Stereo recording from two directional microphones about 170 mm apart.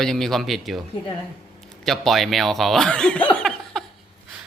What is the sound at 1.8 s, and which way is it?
A man's voice, centre (ahead or behind).